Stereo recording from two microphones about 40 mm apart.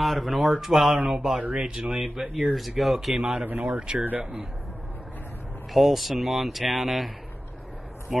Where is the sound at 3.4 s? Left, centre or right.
Right.